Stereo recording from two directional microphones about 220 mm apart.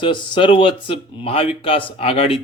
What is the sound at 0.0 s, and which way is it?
A man's voice, 20° left (ahead or behind).